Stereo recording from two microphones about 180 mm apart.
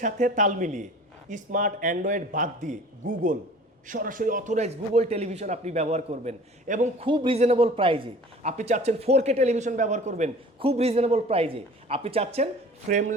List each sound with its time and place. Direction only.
0.0 s a man's voice: 45° right (ahead or behind)
7.0 s a man's voice: 30° right (ahead or behind); by 13.1 s 45° right (ahead or behind)